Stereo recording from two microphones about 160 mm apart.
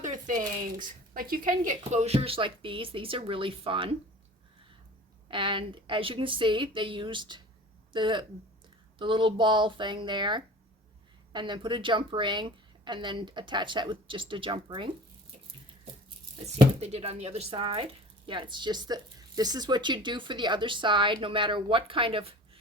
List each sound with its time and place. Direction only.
0.0 s a woman's voice: 50° right (ahead or behind)
1.8 s a woman's voice: 45° right (ahead or behind)
5.3 s a woman's voice: 30° right (ahead or behind)
16.8 s a woman's voice: 40° right (ahead or behind)